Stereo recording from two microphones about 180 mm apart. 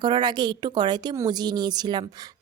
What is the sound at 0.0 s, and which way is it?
A woman's voice, 25° right (ahead or behind).